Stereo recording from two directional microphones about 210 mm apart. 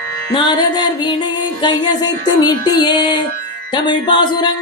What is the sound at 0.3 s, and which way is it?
Music, 20° left (ahead or behind).